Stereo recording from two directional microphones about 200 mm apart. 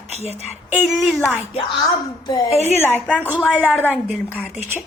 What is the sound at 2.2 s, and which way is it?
Speech, 20° left (ahead or behind).